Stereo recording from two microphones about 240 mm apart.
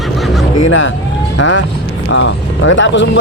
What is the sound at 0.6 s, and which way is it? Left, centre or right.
Speech, left.